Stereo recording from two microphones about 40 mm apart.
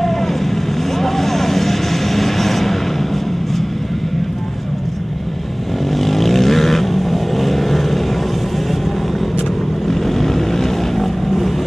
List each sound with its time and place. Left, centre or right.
0.9 s vehicle: centre
5.9 s vehicle: centre
9.8 s vehicle: centre